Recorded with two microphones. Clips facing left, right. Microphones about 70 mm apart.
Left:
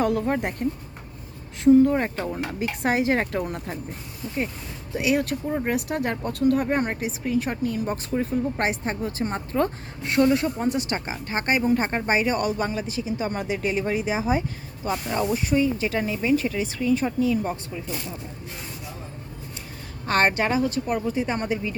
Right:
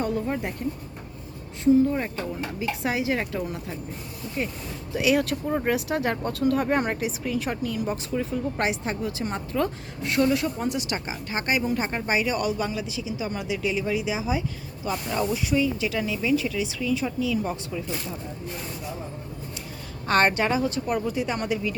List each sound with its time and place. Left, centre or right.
0.0 s speech: left
1.6 s a woman's voice: left
2.0 s speech: left
2.6 s a woman's voice: left
4.9 s speech: left
5.9 s speech: right
6.8 s speech: left
20.1 s a woman's voice: left
20.6 s speech: right
20.9 s speech: left